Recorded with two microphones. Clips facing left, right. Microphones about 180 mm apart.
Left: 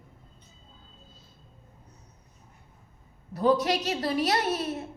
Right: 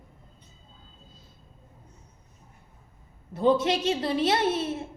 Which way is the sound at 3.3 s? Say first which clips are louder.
Right 1 dB; 25° right (ahead or behind).